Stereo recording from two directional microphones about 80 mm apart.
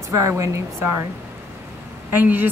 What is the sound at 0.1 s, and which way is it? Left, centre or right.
Speech, right.